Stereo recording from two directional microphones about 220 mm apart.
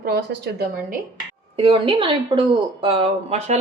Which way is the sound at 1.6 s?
25° right (ahead or behind).